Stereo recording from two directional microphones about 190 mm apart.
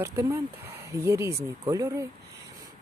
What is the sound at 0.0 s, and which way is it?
Speech, 15° right (ahead or behind).